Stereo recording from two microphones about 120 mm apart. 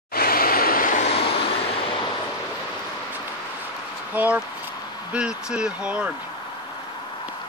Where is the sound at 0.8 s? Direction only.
80° left.